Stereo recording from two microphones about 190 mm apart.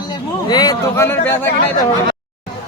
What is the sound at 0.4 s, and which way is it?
Speech, 20° left (ahead or behind).